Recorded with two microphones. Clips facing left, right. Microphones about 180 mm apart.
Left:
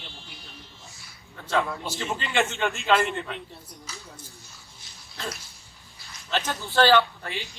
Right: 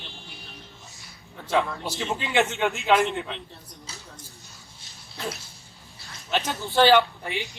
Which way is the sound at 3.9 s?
30° right (ahead or behind).